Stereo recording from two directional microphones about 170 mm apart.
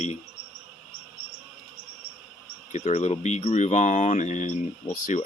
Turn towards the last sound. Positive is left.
turn(degrees=50)  # may be behind; listen again after turning